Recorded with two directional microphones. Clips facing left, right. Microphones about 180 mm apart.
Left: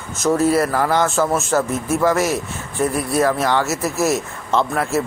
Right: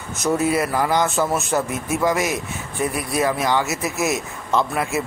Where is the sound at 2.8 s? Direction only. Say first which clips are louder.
Left 4 dB; 10° right (ahead or behind).